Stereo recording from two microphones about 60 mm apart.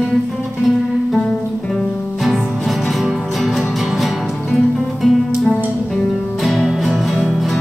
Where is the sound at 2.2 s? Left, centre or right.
Centre.